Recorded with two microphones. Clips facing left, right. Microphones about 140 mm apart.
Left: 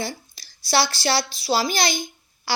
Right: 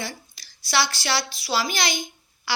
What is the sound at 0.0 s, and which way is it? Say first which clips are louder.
A woman's voice: left 4 dB; 30° left (ahead or behind).